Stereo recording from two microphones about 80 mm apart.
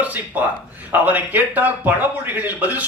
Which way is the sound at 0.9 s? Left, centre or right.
Right.